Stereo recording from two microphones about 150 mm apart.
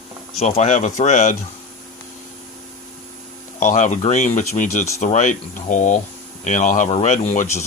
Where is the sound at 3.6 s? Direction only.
55° left (ahead or behind).